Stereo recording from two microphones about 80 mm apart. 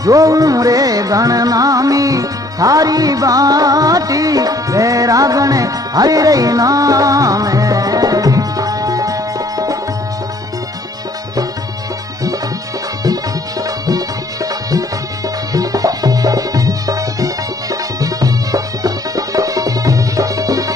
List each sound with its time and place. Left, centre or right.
0.0 s music: right
13.0 s music: right